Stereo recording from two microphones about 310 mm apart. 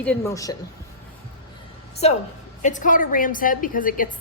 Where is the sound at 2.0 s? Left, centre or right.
Centre.